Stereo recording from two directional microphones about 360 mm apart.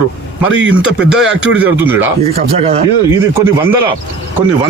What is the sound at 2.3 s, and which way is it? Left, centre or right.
Speech, centre.